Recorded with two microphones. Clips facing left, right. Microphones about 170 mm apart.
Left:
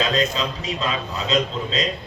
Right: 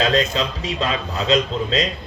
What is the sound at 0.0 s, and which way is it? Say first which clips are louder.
A man's voice: right 3 dB; 35° right (ahead or behind).